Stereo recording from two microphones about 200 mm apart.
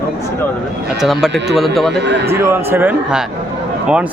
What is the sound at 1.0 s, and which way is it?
Speech, centre (ahead or behind).